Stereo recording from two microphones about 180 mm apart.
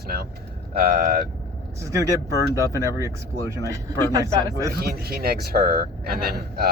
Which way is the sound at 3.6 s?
20° right (ahead or behind).